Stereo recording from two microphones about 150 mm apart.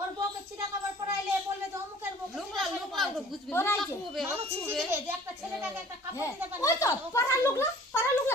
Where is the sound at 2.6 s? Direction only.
Centre (ahead or behind).